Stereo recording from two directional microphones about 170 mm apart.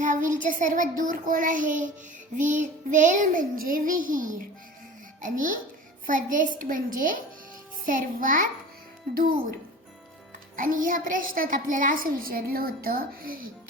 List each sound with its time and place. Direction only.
0.0 s child singing: 50° right (ahead or behind)
9.1 s a woman's voice: 60° right (ahead or behind)
10.6 s a woman's voice: 55° right (ahead or behind)